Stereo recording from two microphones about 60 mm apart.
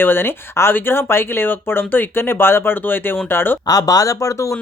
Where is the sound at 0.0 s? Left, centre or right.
Left.